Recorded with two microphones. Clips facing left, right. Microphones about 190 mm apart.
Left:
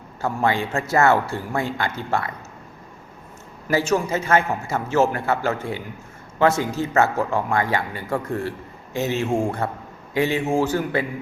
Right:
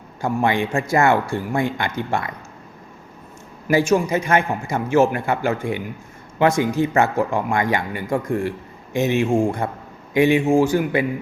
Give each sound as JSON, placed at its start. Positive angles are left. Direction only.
{"t": 0.2, "sound": "speech", "side_deg": -15}
{"t": 3.7, "sound": "speech", "side_deg": -15}